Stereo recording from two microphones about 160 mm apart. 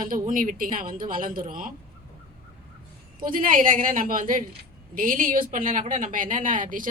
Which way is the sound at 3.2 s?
60° right (ahead or behind).